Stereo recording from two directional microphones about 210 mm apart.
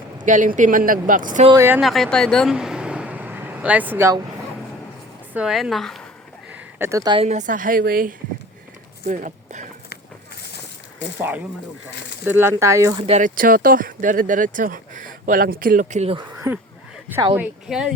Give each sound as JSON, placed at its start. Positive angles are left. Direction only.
{"t": 0.3, "sound": "speech", "side_deg": -40}
{"t": 1.5, "sound": "speech", "side_deg": -15}
{"t": 1.8, "sound": "vehicle", "side_deg": 0}
{"t": 5.3, "sound": "a woman's voice", "side_deg": -5}
{"t": 6.5, "sound": "a woman's voice", "side_deg": -10}
{"t": 11.2, "sound": "speech", "side_deg": -10}
{"t": 13.1, "sound": "speech", "side_deg": -35}
{"t": 16.3, "sound": "a woman's voice", "side_deg": -10}